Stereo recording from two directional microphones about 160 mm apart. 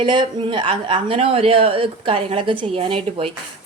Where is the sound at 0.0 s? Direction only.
30° right (ahead or behind).